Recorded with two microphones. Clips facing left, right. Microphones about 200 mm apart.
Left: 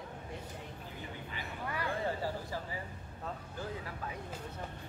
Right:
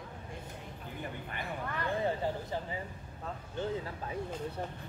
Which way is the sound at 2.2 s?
20° right (ahead or behind).